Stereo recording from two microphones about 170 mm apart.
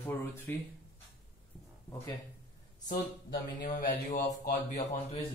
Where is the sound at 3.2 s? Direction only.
55° left (ahead or behind).